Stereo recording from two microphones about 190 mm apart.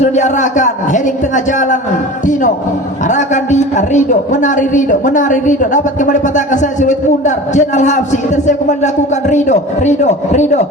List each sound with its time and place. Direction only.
0.0 s a man's voice: 40° left (ahead or behind)
3.1 s a man's voice: 40° left (ahead or behind)